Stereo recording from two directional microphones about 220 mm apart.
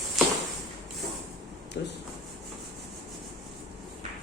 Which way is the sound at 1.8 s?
45° left (ahead or behind).